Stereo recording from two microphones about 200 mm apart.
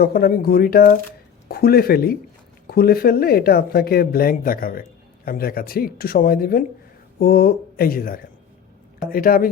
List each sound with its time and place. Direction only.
0.0 s speech: 50° left (ahead or behind)